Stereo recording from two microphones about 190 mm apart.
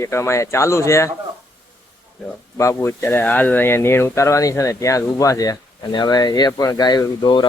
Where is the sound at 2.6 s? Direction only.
15° left (ahead or behind).